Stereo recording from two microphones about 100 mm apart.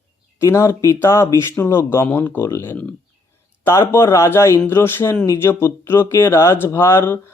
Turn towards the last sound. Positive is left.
turn(degrees=25)  # may be behind; listen again after turning